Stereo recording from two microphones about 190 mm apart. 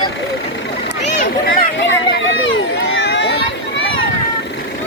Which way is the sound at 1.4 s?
60° left (ahead or behind).